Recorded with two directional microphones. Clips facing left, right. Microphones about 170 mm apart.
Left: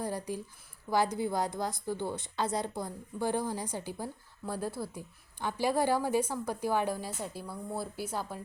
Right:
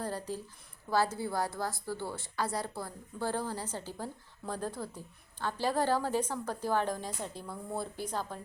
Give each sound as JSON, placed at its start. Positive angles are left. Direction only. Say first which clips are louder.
{"t": 0.0, "sound": "a woman's voice", "louder": "left 2 dB", "side_deg": 15}